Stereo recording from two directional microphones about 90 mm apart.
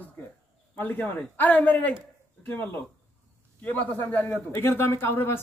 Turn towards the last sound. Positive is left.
turn(degrees=25)  # may be behind; listen again after turning